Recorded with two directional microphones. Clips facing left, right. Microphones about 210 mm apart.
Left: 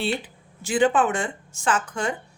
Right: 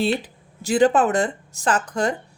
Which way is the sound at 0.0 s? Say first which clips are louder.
Right 5 dB; 40° right (ahead or behind).